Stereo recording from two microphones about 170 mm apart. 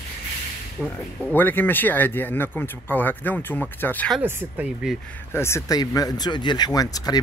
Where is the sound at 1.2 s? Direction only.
10° left (ahead or behind).